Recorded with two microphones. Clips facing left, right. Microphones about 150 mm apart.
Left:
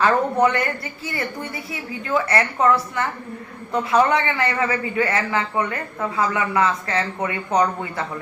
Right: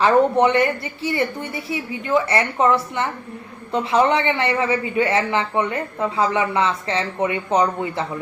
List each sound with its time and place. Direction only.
0.0 s a man's voice: 25° right (ahead or behind)